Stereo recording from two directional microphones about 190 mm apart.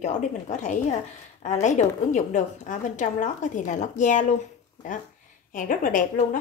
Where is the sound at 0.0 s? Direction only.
35° left (ahead or behind).